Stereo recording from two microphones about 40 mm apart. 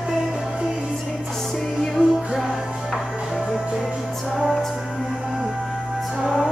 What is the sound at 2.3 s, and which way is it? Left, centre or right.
Music, centre.